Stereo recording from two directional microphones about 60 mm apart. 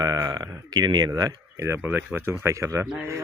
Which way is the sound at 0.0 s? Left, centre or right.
Right.